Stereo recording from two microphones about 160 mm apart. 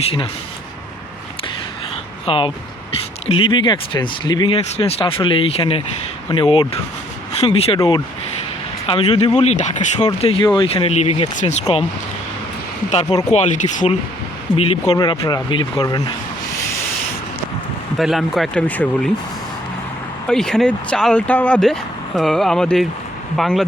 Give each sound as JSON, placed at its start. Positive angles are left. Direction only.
{"t": 0.0, "sound": "speech", "side_deg": 35}
{"t": 2.2, "sound": "speech", "side_deg": 35}
{"t": 10.2, "sound": "speech", "side_deg": 35}
{"t": 12.9, "sound": "speech", "side_deg": 40}
{"t": 14.5, "sound": "speech", "side_deg": 35}
{"t": 17.9, "sound": "speech", "side_deg": 0}
{"t": 20.2, "sound": "speech", "side_deg": 5}